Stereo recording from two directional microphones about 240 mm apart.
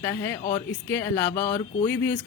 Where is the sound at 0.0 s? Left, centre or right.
Centre.